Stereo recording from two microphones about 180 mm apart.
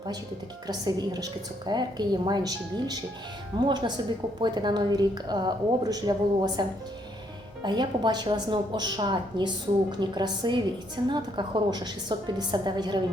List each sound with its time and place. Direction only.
0.7 s a woman's voice: 20° right (ahead or behind)